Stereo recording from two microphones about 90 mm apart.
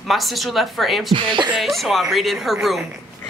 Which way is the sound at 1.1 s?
65° right (ahead or behind).